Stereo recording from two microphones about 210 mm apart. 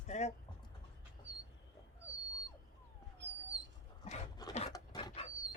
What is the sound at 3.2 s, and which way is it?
Dog, 55° right (ahead or behind).